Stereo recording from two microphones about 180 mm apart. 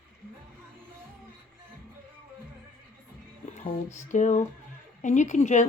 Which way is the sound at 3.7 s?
45° left (ahead or behind).